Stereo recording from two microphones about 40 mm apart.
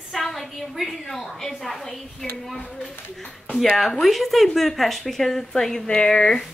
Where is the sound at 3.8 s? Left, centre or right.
Centre.